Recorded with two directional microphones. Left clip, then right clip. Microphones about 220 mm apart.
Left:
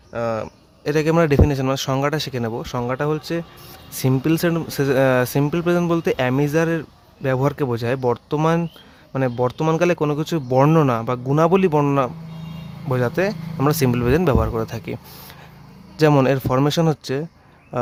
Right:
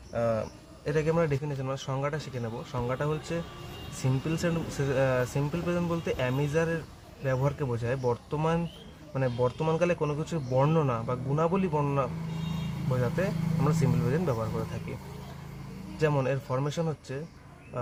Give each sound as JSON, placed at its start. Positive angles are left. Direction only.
{"t": 0.1, "sound": "speech", "side_deg": 50}